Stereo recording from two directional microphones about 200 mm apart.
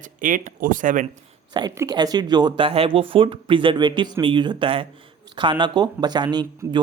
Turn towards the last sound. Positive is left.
turn(degrees=-20)  # may be behind; listen again after turning